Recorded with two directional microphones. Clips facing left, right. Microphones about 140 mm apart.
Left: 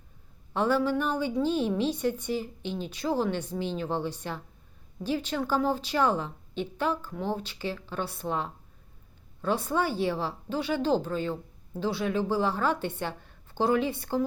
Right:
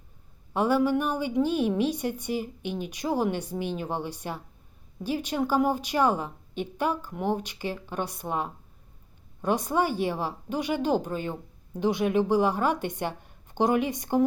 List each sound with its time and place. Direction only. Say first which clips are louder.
0.5 s a woman's voice: right 2 dB; 10° right (ahead or behind)